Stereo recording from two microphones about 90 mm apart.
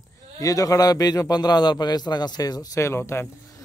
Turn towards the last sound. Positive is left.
turn(degrees=30)  # may be behind; listen again after turning